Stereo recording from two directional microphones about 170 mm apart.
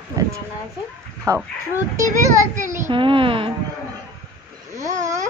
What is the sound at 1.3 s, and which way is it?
A child's voice, 20° right (ahead or behind).